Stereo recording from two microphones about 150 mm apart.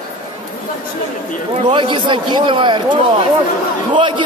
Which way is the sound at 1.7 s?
35° right (ahead or behind).